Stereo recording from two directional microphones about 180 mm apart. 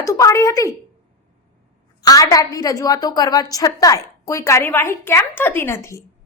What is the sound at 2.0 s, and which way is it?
A woman's voice, 20° left (ahead or behind).